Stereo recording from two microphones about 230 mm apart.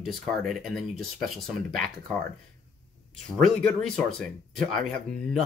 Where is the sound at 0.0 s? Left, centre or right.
Centre.